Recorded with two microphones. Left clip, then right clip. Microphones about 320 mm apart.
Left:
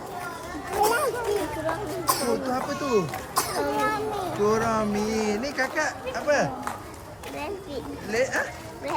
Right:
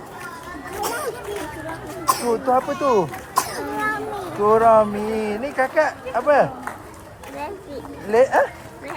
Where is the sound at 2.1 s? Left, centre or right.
Centre.